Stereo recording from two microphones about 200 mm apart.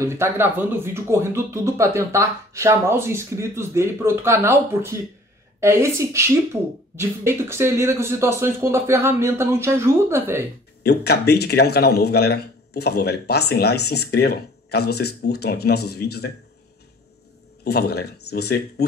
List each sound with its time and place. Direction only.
0.0 s speech: 10° right (ahead or behind)
10.8 s a man's voice: 55° left (ahead or behind)
17.6 s a man's voice: 55° left (ahead or behind)